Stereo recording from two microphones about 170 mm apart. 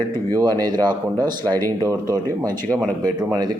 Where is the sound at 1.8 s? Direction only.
20° right (ahead or behind).